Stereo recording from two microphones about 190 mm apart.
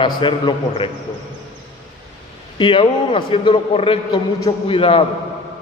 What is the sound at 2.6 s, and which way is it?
A man's voice, 25° left (ahead or behind).